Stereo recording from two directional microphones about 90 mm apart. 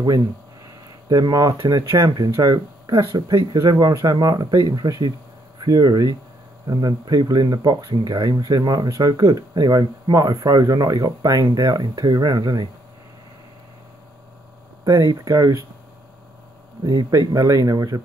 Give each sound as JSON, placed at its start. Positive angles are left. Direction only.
{"t": 1.0, "sound": "speech", "side_deg": -45}
{"t": 2.0, "sound": "speech", "side_deg": -60}
{"t": 2.3, "sound": "speech", "side_deg": -45}
{"t": 14.9, "sound": "speech", "side_deg": -35}
{"t": 16.8, "sound": "speech", "side_deg": -45}